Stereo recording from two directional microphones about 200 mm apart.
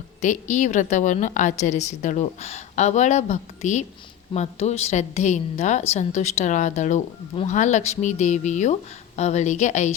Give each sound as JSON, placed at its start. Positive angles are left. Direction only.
{"t": 0.2, "sound": "a woman's voice", "side_deg": 35}